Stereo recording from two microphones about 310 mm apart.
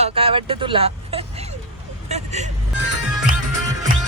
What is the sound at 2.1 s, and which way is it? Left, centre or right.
Vehicle, right.